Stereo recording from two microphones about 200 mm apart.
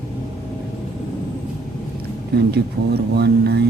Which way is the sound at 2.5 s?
55° right (ahead or behind).